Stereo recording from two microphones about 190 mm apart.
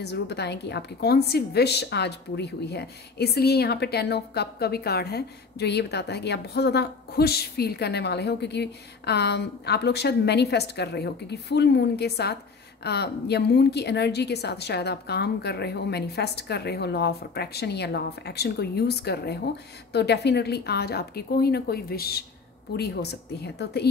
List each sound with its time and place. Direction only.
0.0 s a woman's voice: 60° left (ahead or behind)
23.4 s a woman's voice: 60° left (ahead or behind)